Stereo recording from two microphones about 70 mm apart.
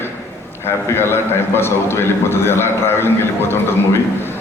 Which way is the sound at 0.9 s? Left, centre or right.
Left.